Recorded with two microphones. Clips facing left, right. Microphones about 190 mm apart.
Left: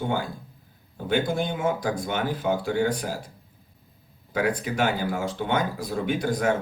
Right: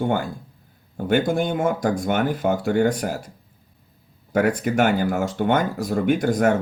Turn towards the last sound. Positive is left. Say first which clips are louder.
# right 5 dB
turn(degrees=-50)  # may be behind; listen again after turning